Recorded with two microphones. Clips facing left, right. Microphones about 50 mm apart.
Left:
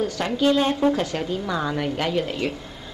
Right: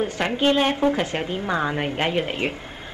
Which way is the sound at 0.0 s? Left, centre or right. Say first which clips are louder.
Even; right.